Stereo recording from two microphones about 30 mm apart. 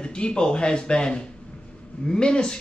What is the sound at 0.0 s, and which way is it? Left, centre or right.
A man's voice, left.